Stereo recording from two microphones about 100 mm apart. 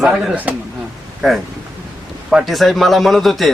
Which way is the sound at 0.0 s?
10° right (ahead or behind).